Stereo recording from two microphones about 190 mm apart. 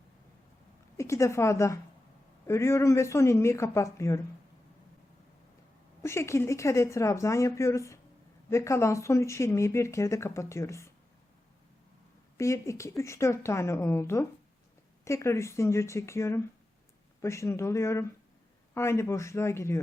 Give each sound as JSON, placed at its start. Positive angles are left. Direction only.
{"t": 0.9, "sound": "speech", "side_deg": 15}
{"t": 6.0, "sound": "speech", "side_deg": 15}
{"t": 12.4, "sound": "speech", "side_deg": 15}